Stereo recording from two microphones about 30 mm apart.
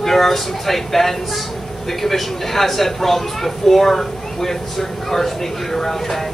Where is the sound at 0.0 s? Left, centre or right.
Centre.